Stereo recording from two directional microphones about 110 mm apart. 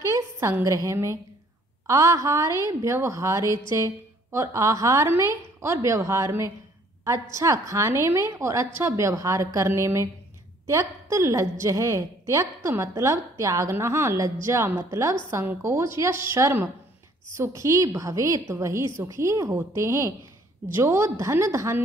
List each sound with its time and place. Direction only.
0.0 s a woman's voice: 25° right (ahead or behind)